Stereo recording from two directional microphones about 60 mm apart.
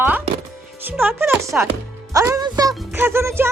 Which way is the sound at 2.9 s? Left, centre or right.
Right.